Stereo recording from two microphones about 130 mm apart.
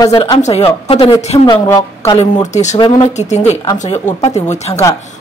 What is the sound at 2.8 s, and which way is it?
Speech, 35° left (ahead or behind).